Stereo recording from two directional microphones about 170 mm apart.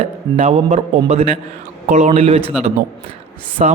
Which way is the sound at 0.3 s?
40° right (ahead or behind).